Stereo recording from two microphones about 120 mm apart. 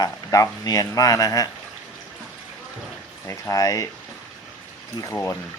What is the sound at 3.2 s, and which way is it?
Speech, 25° left (ahead or behind).